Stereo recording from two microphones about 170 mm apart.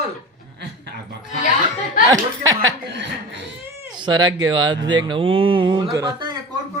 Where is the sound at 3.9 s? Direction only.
25° right (ahead or behind).